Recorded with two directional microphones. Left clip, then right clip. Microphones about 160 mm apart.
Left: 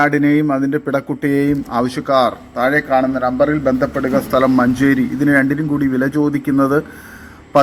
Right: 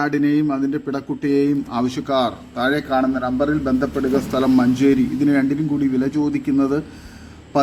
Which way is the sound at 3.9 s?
10° left (ahead or behind).